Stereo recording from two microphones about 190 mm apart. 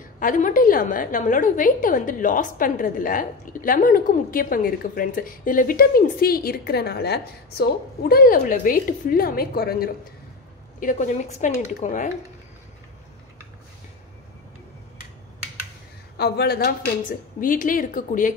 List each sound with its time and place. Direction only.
0.2 s a woman's voice: 45° left (ahead or behind)
10.8 s speech: 45° left (ahead or behind)
16.2 s a woman's voice: 55° left (ahead or behind)